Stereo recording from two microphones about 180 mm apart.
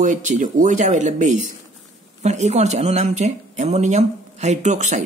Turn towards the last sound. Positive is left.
turn(degrees=-40)  # may be behind; listen again after turning